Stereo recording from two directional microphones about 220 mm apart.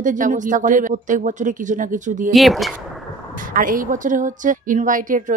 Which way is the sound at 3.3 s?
40° right (ahead or behind).